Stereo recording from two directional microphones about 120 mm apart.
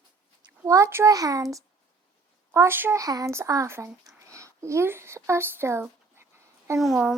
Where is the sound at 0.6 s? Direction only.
25° right (ahead or behind).